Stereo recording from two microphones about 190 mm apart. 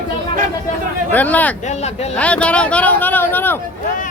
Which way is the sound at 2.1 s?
5° left (ahead or behind).